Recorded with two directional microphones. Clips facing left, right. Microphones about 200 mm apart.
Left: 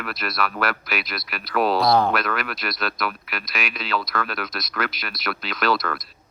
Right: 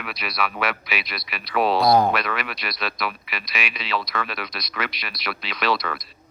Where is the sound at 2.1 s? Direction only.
Centre (ahead or behind).